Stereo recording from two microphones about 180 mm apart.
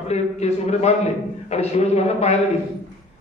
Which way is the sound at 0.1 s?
35° left (ahead or behind).